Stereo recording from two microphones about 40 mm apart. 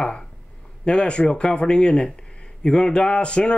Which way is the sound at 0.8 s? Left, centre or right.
Left.